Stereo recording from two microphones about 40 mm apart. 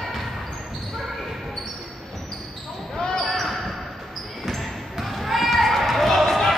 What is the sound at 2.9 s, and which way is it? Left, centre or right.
Basketball bounce, centre.